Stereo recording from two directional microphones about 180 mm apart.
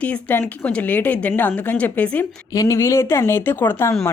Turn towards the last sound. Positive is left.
turn(degrees=10)  # may be behind; listen again after turning